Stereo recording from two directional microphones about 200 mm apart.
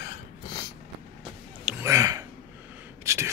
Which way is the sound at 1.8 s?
15° right (ahead or behind).